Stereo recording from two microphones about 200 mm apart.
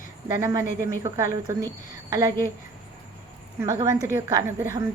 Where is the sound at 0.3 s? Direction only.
15° right (ahead or behind).